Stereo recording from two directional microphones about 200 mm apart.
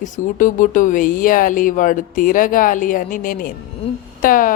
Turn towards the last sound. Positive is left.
turn(degrees=45)  # may be behind; listen again after turning